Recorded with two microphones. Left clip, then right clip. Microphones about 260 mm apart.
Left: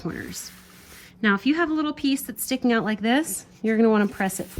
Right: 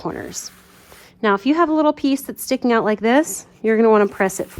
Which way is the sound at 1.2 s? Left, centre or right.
Centre.